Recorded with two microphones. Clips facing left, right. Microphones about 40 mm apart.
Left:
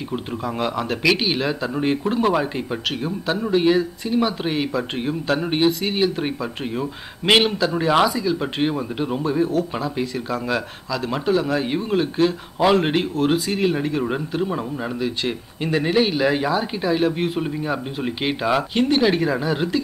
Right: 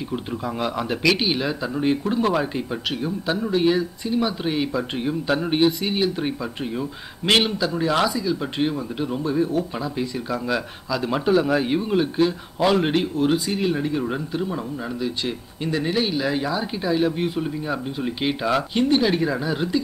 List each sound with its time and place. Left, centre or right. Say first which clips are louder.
0.1 s speech: left 3 dB; centre
10.9 s speech: right 1 dB; centre
11.6 s a man's voice: even; centre